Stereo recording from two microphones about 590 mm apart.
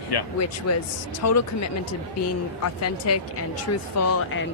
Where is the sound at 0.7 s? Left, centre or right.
Left.